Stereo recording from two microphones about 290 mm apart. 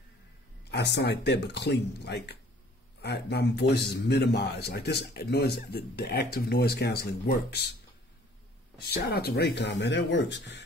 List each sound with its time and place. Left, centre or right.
0.7 s a man's voice: left
8.7 s a man's voice: left